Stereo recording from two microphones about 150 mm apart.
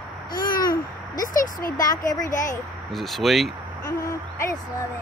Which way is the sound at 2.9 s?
Centre (ahead or behind).